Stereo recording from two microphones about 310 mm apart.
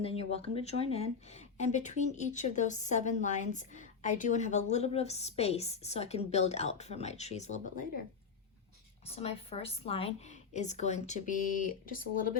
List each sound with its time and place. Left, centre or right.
0.0 s speech: centre
9.1 s speech: centre